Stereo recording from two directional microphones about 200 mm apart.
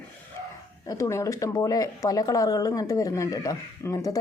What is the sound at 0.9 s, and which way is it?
Speech, 15° left (ahead or behind).